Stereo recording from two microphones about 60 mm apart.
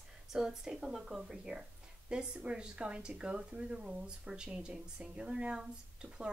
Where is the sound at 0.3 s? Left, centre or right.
Centre.